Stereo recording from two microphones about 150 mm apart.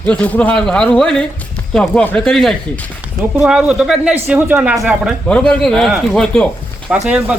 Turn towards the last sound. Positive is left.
turn(degrees=-5)  # may be behind; listen again after turning